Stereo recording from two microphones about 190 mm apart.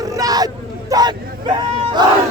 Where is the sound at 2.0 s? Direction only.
25° right (ahead or behind).